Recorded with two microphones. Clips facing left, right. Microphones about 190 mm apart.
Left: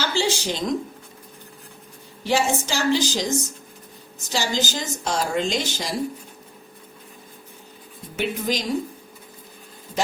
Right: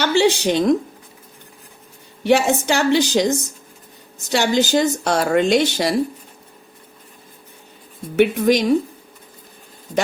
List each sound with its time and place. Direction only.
0.0 s speech: 65° right (ahead or behind)
2.2 s speech: 60° right (ahead or behind)
8.1 s speech: 60° right (ahead or behind)